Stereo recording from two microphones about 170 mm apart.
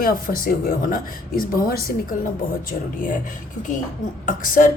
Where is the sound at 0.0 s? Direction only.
60° left (ahead or behind).